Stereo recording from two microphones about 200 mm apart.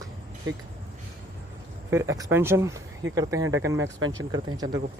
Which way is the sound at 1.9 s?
15° right (ahead or behind).